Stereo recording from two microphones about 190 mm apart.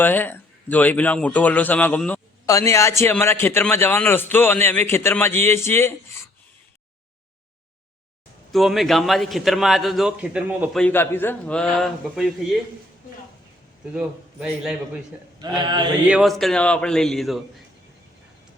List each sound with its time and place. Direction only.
0.0 s a man's voice: 10° left (ahead or behind)
8.5 s a man's voice: centre (ahead or behind)
10.8 s a man's voice: 10° left (ahead or behind)
13.9 s a man's voice: 5° right (ahead or behind)
15.4 s a sound: 20° right (ahead or behind)
16.0 s a man's voice: 5° right (ahead or behind)